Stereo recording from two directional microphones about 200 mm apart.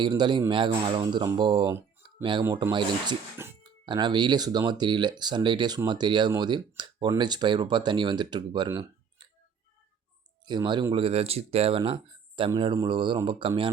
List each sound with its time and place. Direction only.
0.0 s speech: 20° right (ahead or behind)
10.4 s speech: 20° right (ahead or behind)